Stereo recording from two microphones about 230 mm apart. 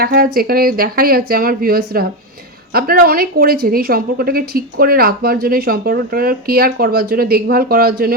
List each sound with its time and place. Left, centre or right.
0.0 s a woman's voice: right